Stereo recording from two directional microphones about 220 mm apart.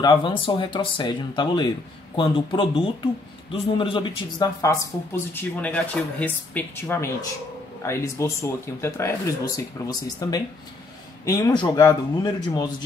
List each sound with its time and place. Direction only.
0.0 s speech: 20° left (ahead or behind)